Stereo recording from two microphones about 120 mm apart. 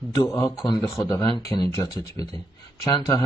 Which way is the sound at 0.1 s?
30° left (ahead or behind).